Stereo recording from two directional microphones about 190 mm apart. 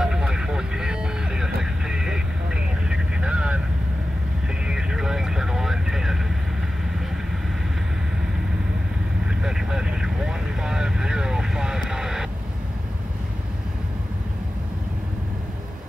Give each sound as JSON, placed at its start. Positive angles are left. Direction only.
{"t": 0.0, "sound": "vehicle", "side_deg": -5}
{"t": 4.6, "sound": "vehicle", "side_deg": -5}
{"t": 9.4, "sound": "vehicle", "side_deg": -5}